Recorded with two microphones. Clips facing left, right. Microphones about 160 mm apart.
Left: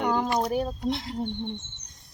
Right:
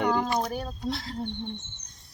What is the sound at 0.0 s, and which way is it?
Speech, centre (ahead or behind).